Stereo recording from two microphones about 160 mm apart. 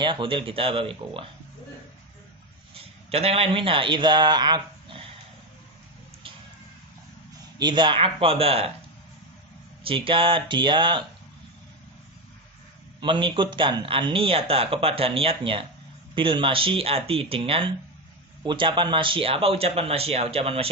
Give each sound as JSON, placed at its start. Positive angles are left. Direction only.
{"t": 0.0, "sound": "speech", "side_deg": -30}
{"t": 3.1, "sound": "speech", "side_deg": -40}
{"t": 7.6, "sound": "speech", "side_deg": -30}
{"t": 9.8, "sound": "speech", "side_deg": -35}
{"t": 13.0, "sound": "speech", "side_deg": -30}